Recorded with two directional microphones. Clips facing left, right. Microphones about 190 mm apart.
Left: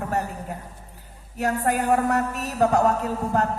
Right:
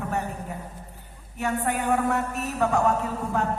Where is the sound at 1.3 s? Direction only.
40° left (ahead or behind).